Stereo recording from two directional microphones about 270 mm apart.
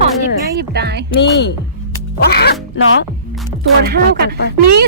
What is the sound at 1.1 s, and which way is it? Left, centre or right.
Speech, left.